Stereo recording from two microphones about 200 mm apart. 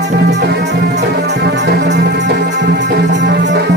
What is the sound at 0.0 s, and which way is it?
Music, 55° right (ahead or behind).